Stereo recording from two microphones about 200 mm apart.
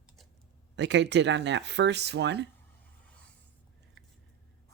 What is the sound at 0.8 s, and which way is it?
Speech, 60° right (ahead or behind).